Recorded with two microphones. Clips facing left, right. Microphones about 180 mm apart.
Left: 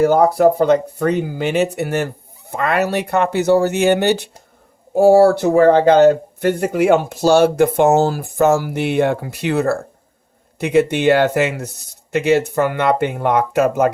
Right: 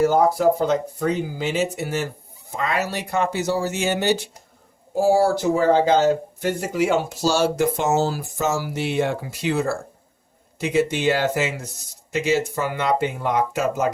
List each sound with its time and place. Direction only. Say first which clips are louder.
0.0 s speech: left 5 dB; 65° left (ahead or behind)